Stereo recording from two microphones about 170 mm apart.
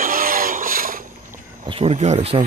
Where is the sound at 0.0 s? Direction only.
55° right (ahead or behind).